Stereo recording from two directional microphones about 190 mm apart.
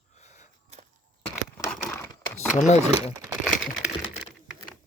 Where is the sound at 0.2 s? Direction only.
35° left (ahead or behind).